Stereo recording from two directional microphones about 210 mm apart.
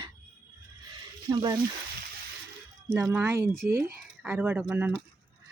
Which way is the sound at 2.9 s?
10° right (ahead or behind).